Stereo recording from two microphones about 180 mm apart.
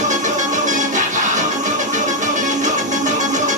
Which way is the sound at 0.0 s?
45° right (ahead or behind).